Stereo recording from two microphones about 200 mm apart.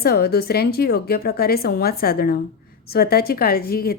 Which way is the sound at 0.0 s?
50° left (ahead or behind).